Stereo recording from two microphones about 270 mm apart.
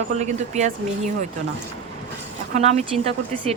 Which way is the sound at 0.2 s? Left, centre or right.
Right.